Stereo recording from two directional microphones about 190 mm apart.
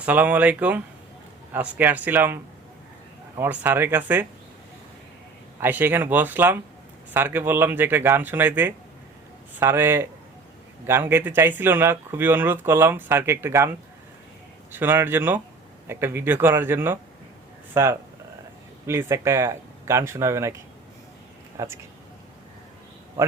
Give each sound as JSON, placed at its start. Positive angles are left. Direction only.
{"t": 0.0, "sound": "speech", "side_deg": -10}
{"t": 5.5, "sound": "speech", "side_deg": -10}
{"t": 21.6, "sound": "speech", "side_deg": -15}